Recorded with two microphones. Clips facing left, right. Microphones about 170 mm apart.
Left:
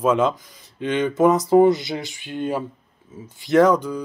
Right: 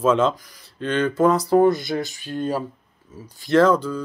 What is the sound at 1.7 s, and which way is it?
Speech, 50° right (ahead or behind).